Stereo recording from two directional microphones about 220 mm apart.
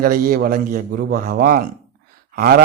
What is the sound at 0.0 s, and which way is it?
A man's voice, 40° right (ahead or behind).